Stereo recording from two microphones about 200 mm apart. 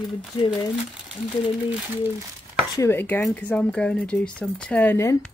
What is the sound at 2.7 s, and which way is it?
Speech, 15° left (ahead or behind).